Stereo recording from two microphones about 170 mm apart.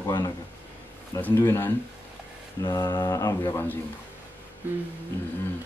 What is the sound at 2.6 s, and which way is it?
Speech, 25° left (ahead or behind).